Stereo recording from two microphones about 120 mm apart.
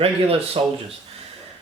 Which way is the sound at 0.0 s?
55° right (ahead or behind).